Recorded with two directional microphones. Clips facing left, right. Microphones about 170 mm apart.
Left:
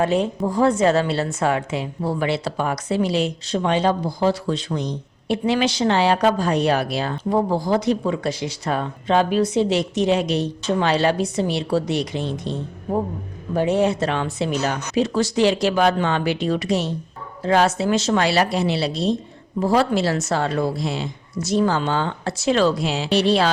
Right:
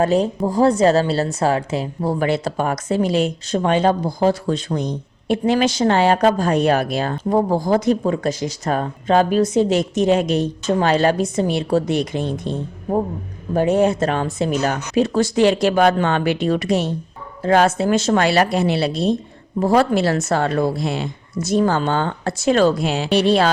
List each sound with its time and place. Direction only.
0.0 s a woman's voice: 40° right (ahead or behind)